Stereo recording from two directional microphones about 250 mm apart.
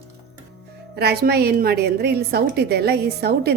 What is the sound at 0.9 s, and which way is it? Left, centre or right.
A woman's voice, right.